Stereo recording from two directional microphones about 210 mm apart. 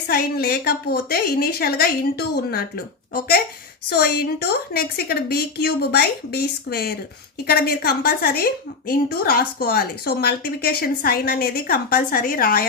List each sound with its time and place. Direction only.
0.1 s a woman's voice: 45° left (ahead or behind)